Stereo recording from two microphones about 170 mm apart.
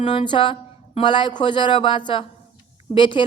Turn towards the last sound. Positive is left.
turn(degrees=30)  # may be behind; listen again after turning